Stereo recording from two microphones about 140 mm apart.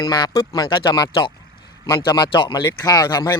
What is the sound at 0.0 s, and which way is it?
A man's voice, 30° left (ahead or behind).